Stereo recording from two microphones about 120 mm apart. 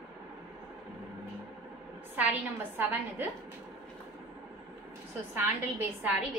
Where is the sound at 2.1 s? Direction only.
15° right (ahead or behind).